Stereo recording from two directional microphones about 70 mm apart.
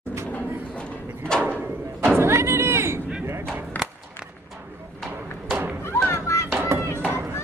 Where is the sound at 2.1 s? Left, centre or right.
Right.